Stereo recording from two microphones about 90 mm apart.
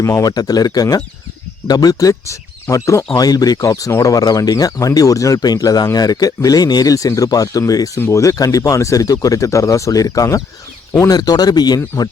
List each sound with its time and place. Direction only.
0.0 s speech: 35° left (ahead or behind)
7.9 s speech: 30° left (ahead or behind); by 11.8 s 50° left (ahead or behind)